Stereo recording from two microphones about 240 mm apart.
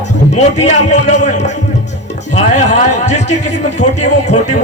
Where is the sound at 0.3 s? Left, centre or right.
Left.